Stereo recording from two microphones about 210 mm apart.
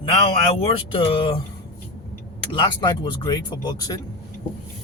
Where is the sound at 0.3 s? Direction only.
25° left (ahead or behind).